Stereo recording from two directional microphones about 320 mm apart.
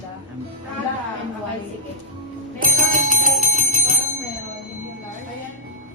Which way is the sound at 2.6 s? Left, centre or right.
Right.